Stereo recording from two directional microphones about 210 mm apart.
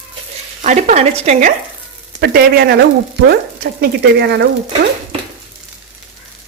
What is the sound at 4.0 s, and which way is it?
Stir, 50° right (ahead or behind).